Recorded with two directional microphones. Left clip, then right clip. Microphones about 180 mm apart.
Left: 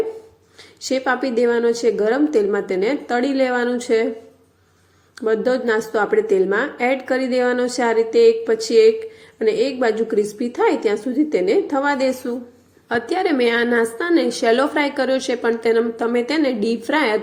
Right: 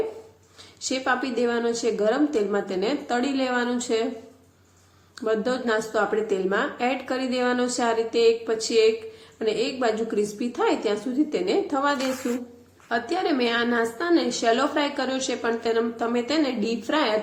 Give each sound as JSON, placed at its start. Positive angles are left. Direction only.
{"t": 0.8, "sound": "speech", "side_deg": 25}
{"t": 5.2, "sound": "a woman's voice", "side_deg": 25}